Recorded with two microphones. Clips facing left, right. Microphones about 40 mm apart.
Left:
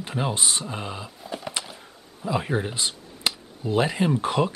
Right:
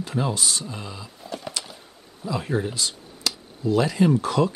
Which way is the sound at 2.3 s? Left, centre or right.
Left.